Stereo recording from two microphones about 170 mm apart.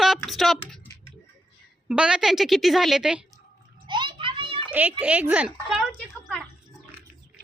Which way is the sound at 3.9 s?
25° right (ahead or behind).